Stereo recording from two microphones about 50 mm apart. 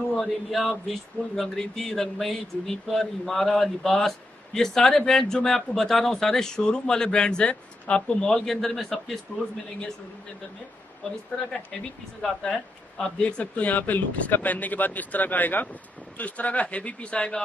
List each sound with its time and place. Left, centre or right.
0.1 s speech: centre
11.3 s a man's voice: left
12.2 s speech: centre
13.2 s a man's voice: left